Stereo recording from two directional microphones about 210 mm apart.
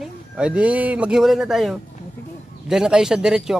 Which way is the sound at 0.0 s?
5° right (ahead or behind).